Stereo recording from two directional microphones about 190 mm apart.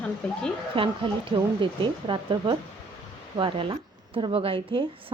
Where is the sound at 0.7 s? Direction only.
25° right (ahead or behind).